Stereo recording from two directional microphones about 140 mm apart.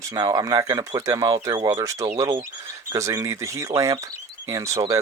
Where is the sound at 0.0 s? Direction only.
25° right (ahead or behind).